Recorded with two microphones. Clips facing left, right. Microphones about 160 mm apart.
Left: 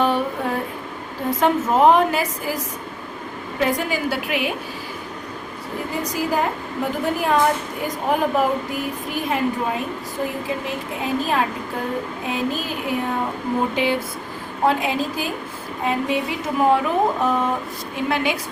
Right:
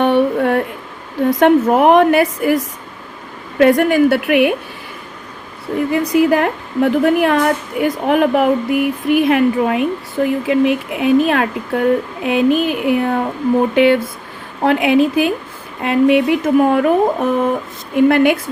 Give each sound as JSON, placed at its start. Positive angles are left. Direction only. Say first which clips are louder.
{"t": 0.0, "sound": "a sound", "louder": "right 7 dB", "side_deg": -65}
{"t": 1.4, "sound": "a woman's voice", "louder": "right 5 dB", "side_deg": -65}
{"t": 3.6, "sound": "a woman's voice", "louder": "right 11 dB", "side_deg": -65}
{"t": 5.7, "sound": "a woman's voice", "louder": "right 12 dB", "side_deg": -60}
{"t": 17.9, "sound": "a woman's voice", "louder": "right 11 dB", "side_deg": -55}